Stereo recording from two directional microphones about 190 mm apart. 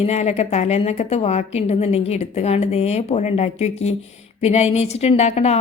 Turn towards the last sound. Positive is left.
turn(degrees=35)  # may be behind; listen again after turning